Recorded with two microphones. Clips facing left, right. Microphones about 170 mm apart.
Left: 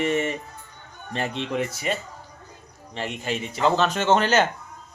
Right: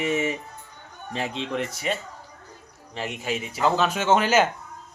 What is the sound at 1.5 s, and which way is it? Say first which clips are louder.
Speech: left 1 dB; centre (ahead or behind).